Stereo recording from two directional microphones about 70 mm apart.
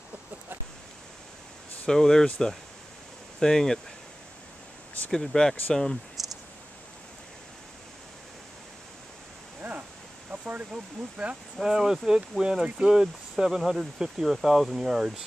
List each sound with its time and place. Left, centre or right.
1.9 s speech: centre
5.1 s speech: centre
6.2 s a sound: centre
9.6 s a sound: right
10.3 s speech: centre
11.5 s speech: centre